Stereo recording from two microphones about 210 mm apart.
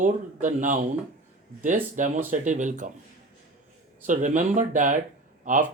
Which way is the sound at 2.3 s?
35° right (ahead or behind).